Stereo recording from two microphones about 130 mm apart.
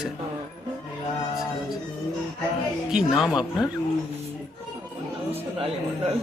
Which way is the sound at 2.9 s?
5° right (ahead or behind).